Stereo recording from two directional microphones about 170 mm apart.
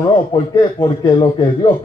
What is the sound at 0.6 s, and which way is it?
A man's voice, 30° left (ahead or behind).